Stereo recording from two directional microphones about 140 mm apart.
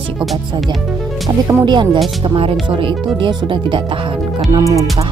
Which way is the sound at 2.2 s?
40° right (ahead or behind).